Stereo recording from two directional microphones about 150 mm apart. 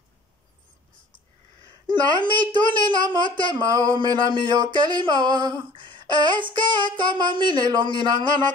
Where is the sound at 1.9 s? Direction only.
30° right (ahead or behind).